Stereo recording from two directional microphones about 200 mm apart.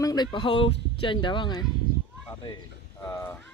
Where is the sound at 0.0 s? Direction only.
20° left (ahead or behind).